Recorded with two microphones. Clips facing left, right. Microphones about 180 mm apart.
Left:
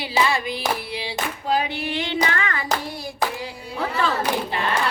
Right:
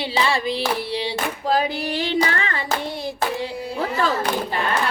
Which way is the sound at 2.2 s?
30° right (ahead or behind).